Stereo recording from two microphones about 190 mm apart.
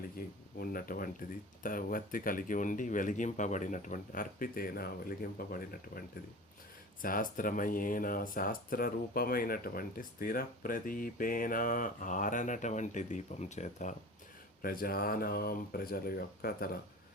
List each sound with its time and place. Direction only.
0.2 s speech: 50° left (ahead or behind)
14.6 s speech: 50° left (ahead or behind)